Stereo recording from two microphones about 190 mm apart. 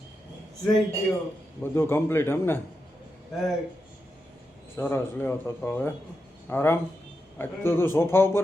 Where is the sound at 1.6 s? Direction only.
10° left (ahead or behind).